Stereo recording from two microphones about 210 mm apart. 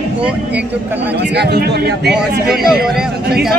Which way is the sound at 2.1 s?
Centre (ahead or behind).